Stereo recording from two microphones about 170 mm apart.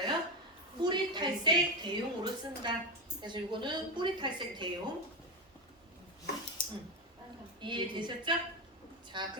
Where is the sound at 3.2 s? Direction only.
25° right (ahead or behind).